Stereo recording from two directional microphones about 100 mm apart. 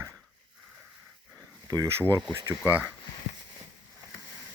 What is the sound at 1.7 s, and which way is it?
Speech, 35° right (ahead or behind).